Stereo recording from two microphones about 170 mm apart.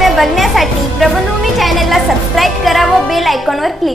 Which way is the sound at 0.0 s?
Centre (ahead or behind).